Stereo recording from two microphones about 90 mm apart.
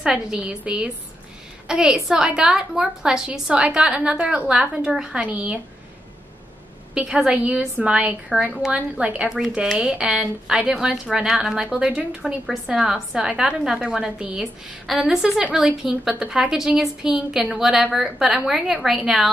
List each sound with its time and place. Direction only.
0.0 s a woman's voice: 10° right (ahead or behind)
6.9 s a woman's voice: 10° right (ahead or behind)